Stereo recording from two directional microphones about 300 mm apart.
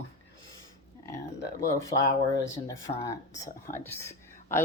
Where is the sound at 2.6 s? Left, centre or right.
Centre.